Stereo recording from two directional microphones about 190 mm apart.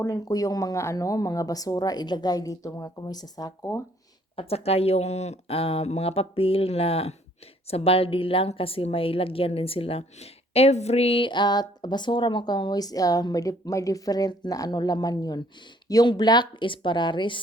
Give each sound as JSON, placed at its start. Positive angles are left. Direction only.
{"t": 0.0, "sound": "a woman's voice", "side_deg": 20}
{"t": 4.4, "sound": "a woman's voice", "side_deg": 30}